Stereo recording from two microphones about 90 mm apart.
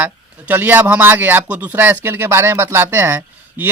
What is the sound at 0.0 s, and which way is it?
Speech, 20° right (ahead or behind).